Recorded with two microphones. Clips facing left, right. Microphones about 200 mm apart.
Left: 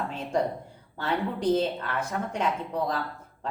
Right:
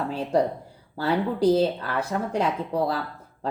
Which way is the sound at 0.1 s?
35° right (ahead or behind).